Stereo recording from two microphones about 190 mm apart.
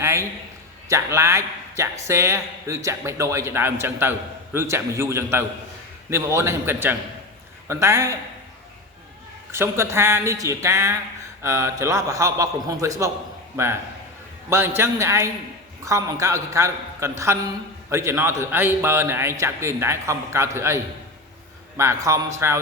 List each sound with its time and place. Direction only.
0.0 s a man's voice: 15° right (ahead or behind)
9.5 s a man's voice: 15° right (ahead or behind)